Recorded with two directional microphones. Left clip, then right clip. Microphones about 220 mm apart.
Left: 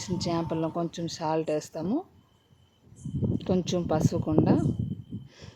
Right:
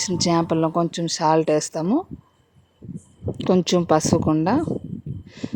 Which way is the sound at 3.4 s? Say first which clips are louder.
Right 10 dB; 25° right (ahead or behind).